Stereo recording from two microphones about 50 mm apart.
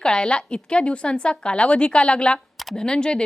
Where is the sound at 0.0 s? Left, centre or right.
Centre.